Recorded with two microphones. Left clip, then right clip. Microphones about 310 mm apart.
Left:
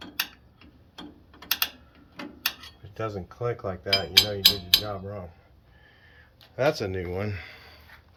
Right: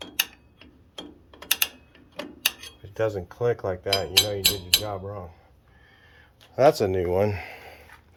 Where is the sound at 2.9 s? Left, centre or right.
Centre.